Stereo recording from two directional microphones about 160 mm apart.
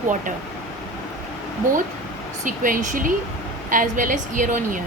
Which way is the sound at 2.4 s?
60° right (ahead or behind).